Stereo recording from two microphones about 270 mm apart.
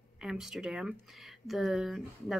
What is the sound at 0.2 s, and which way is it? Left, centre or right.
Speech, centre.